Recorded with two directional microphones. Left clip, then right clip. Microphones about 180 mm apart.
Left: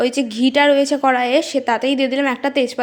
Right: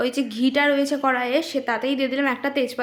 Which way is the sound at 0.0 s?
25° left (ahead or behind).